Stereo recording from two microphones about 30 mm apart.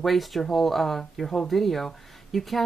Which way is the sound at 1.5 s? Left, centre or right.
Centre.